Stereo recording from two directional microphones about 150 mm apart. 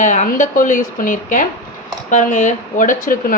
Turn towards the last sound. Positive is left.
turn(degrees=65)  # may be behind; listen again after turning